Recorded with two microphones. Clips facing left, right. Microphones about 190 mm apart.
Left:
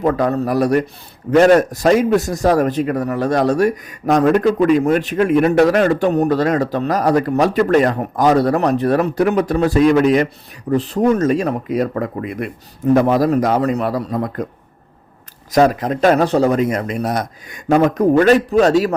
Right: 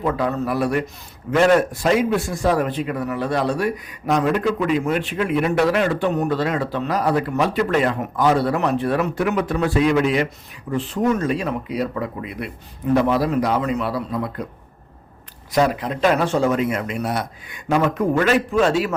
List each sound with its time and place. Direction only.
0.0 s a man's voice: 40° left (ahead or behind)
15.5 s a man's voice: 45° left (ahead or behind)